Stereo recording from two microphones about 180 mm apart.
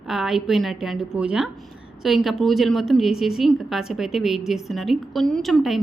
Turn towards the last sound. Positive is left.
turn(degrees=0)  # may be behind; listen again after turning